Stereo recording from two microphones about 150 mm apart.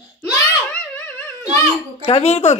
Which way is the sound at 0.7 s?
10° left (ahead or behind).